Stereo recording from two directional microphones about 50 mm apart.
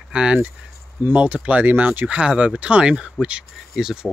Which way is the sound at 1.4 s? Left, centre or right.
Right.